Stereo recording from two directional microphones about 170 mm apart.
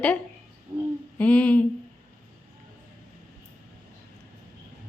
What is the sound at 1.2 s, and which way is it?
Speech, 10° left (ahead or behind).